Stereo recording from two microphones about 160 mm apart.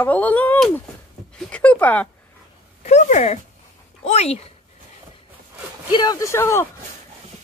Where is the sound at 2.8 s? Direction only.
50° left (ahead or behind).